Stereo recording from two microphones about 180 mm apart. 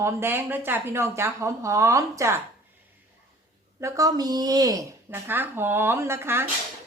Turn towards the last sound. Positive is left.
turn(degrees=-15)  # may be behind; listen again after turning